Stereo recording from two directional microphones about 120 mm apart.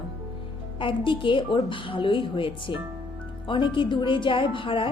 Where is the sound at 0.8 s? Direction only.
45° left (ahead or behind).